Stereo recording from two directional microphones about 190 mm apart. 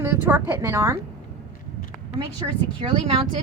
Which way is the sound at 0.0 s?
10° right (ahead or behind).